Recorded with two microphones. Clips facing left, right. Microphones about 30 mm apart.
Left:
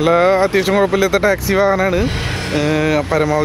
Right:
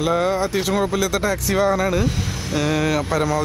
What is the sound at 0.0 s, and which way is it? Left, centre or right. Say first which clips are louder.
Speech: left 7 dB; left.